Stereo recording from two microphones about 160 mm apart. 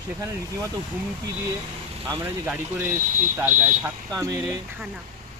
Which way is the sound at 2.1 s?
20° right (ahead or behind).